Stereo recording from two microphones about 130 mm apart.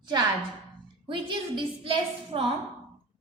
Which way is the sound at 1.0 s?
40° right (ahead or behind).